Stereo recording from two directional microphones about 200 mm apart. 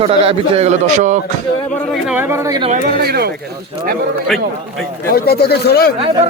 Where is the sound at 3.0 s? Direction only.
50° right (ahead or behind).